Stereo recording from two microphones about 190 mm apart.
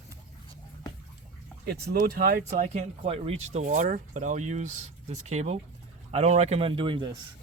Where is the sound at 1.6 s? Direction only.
55° right (ahead or behind); by 7.1 s 25° right (ahead or behind).